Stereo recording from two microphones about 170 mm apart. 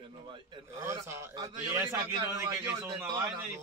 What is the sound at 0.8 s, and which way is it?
A man's voice, 15° right (ahead or behind).